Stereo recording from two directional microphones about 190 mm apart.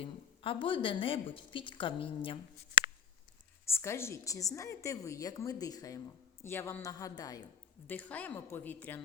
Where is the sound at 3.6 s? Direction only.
15° left (ahead or behind).